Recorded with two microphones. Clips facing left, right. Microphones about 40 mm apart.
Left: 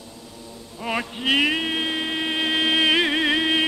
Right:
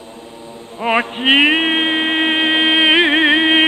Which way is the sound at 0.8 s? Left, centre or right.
Right.